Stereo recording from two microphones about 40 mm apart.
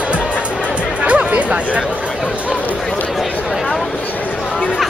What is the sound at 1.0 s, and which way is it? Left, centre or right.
Chatter, right.